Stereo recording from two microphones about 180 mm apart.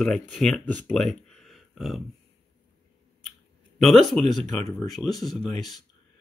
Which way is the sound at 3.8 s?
Centre (ahead or behind).